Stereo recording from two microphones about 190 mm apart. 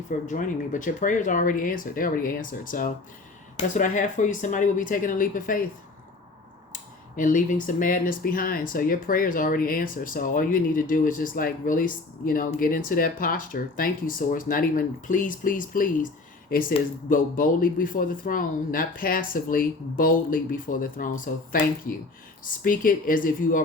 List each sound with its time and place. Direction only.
0.3 s speech: 40° left (ahead or behind)
7.2 s speech: 45° left (ahead or behind)
22.6 s speech: 45° left (ahead or behind)